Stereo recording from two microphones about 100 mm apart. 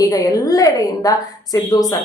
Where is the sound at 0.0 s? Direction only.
35° left (ahead or behind).